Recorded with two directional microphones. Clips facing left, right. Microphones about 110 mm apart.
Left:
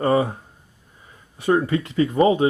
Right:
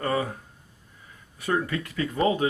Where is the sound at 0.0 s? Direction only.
30° left (ahead or behind).